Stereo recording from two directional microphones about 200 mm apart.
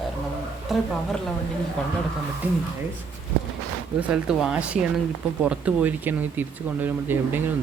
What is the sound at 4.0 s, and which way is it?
Speech, 5° right (ahead or behind).